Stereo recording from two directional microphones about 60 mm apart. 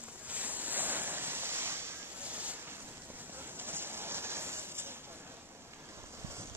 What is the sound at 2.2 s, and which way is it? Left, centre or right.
Boat, right.